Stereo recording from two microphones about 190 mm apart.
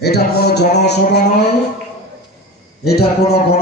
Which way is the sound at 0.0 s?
55° left (ahead or behind).